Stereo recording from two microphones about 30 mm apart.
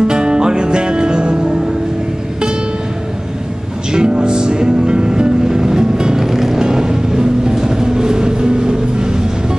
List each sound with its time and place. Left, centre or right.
0.0 s music: right
3.9 s music: right
6.1 s vehicle: centre
6.6 s vehicle: right